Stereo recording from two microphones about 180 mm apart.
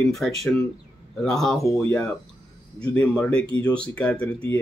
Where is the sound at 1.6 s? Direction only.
15° left (ahead or behind).